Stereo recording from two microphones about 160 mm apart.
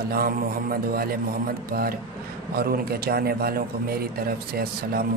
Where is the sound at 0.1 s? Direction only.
70° right (ahead or behind).